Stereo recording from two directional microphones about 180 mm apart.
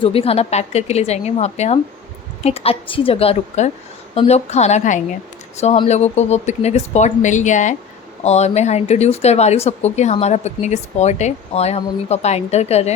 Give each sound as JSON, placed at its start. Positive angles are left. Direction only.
{"t": 0.0, "sound": "speech", "side_deg": 30}